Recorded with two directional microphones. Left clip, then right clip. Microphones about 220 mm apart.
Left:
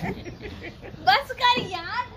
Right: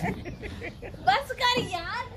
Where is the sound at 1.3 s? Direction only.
10° right (ahead or behind).